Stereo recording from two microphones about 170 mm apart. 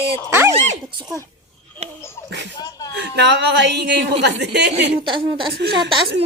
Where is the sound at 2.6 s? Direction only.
20° left (ahead or behind).